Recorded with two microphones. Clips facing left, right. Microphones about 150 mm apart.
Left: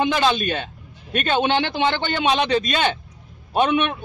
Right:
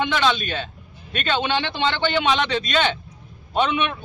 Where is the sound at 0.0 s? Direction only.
40° left (ahead or behind).